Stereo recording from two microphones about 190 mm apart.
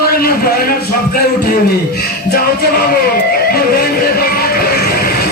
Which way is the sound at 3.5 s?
55° left (ahead or behind).